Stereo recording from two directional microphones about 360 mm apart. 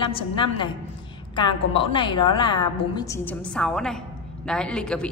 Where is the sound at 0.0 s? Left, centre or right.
Centre.